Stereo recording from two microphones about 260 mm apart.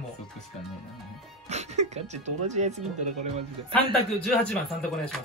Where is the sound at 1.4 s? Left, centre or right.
Right.